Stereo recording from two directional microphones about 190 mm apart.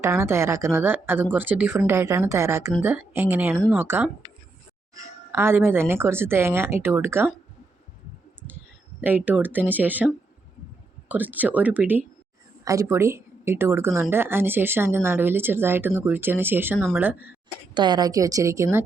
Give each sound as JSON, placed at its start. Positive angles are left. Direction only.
{"t": 0.0, "sound": "speech", "side_deg": -15}
{"t": 5.3, "sound": "speech", "side_deg": -15}
{"t": 9.0, "sound": "speech", "side_deg": -10}
{"t": 11.1, "sound": "speech", "side_deg": -10}
{"t": 17.7, "sound": "speech", "side_deg": -20}